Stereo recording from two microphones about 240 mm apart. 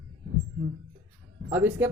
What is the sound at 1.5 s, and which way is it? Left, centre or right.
Speech, centre.